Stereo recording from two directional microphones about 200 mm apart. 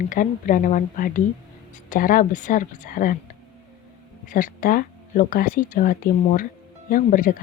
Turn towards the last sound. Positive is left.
turn(degrees=45)  # may be behind; listen again after turning